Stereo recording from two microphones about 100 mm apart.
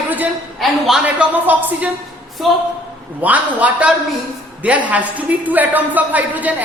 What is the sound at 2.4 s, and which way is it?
Speech, centre (ahead or behind).